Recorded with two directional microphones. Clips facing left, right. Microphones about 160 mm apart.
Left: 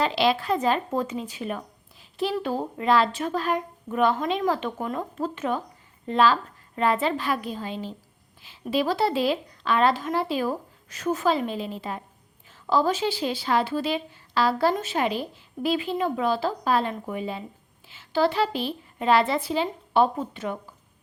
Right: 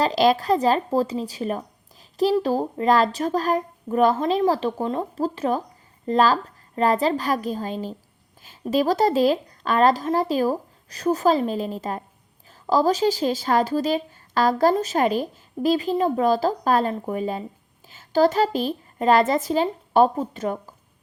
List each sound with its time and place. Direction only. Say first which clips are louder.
0.0 s speech: right 4 dB; 40° right (ahead or behind)